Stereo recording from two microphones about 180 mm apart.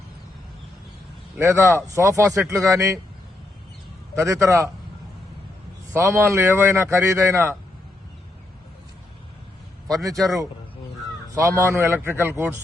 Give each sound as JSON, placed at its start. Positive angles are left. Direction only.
{"t": 1.5, "sound": "a man's voice", "side_deg": -15}
{"t": 4.2, "sound": "a man's voice", "side_deg": -15}
{"t": 5.9, "sound": "a man's voice", "side_deg": -15}
{"t": 9.8, "sound": "a man's voice", "side_deg": 0}
{"t": 11.4, "sound": "a man's voice", "side_deg": -15}